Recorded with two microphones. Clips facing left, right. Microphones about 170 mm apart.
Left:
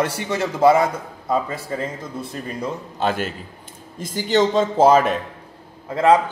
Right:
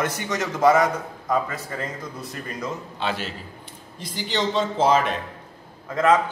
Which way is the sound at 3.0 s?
50° left (ahead or behind).